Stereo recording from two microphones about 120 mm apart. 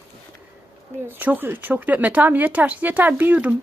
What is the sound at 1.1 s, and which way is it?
Speech, 15° right (ahead or behind).